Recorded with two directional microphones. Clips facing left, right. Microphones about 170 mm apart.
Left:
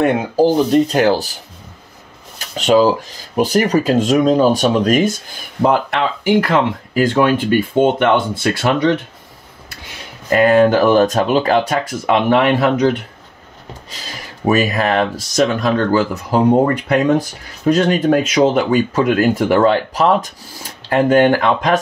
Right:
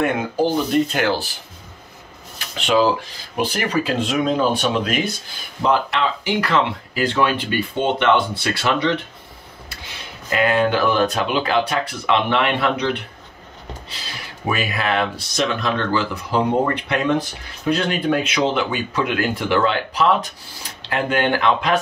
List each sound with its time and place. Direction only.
0.0 s speech: 35° left (ahead or behind)
2.3 s speech: 40° left (ahead or behind)
10.3 s speech: 45° left (ahead or behind)
14.5 s speech: 40° left (ahead or behind)